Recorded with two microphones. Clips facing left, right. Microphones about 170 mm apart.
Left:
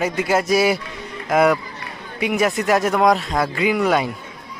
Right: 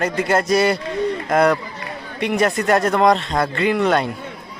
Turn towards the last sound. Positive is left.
turn(degrees=5)  # may be behind; listen again after turning